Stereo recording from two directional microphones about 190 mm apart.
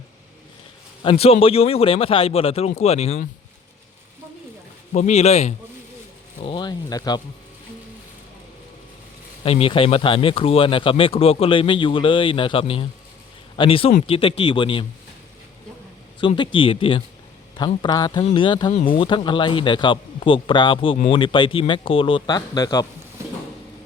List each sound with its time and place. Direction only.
1.0 s speech: 30° left (ahead or behind)
4.9 s speech: 35° left (ahead or behind)
6.4 s speech: 25° left (ahead or behind)
9.4 s speech: 30° left (ahead or behind)
16.2 s speech: 25° left (ahead or behind)